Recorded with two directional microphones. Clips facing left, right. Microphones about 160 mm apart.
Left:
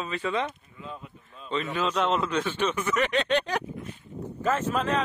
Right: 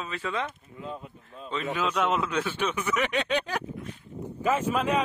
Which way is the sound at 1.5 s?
10° right (ahead or behind).